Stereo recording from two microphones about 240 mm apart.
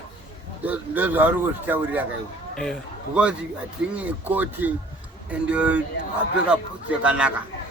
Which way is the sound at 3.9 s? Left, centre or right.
Centre.